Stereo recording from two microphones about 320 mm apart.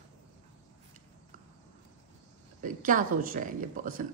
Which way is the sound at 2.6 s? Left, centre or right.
Right.